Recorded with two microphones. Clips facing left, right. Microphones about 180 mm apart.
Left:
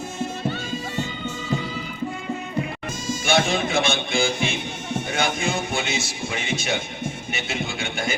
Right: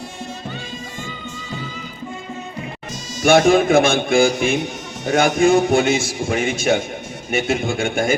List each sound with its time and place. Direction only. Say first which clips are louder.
3.2 s a man's voice: right 10 dB; 55° right (ahead or behind)